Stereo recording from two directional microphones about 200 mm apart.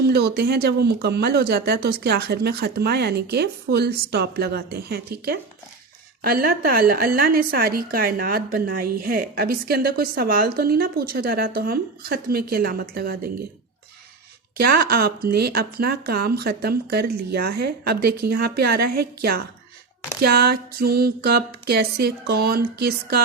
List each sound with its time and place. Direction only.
0.1 s speech: 55° right (ahead or behind)
14.6 s speech: 50° right (ahead or behind)